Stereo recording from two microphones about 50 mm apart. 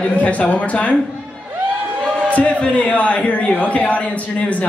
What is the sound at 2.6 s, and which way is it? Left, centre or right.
A man's voice, left.